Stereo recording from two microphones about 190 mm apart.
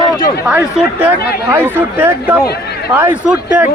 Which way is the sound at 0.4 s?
10° right (ahead or behind).